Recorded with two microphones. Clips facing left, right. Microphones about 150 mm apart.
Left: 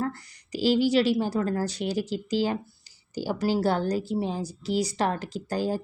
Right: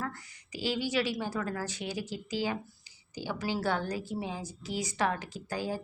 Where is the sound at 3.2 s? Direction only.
40° left (ahead or behind).